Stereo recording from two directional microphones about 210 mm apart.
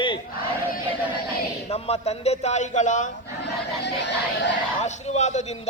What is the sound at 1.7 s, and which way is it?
A man's voice, 30° left (ahead or behind).